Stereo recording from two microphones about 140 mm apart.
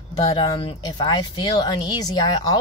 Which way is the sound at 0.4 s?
35° left (ahead or behind).